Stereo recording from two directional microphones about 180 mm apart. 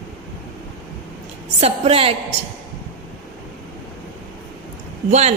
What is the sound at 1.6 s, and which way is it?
Music, 35° right (ahead or behind).